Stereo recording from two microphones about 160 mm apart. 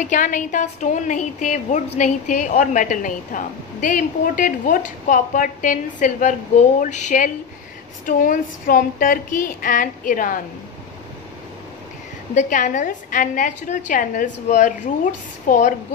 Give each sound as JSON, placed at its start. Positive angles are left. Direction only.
{"t": 0.0, "sound": "a woman's voice", "side_deg": 50}
{"t": 8.0, "sound": "a woman's voice", "side_deg": 60}
{"t": 12.4, "sound": "a woman's voice", "side_deg": 50}